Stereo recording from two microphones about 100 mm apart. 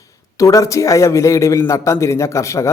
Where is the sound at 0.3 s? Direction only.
35° left (ahead or behind).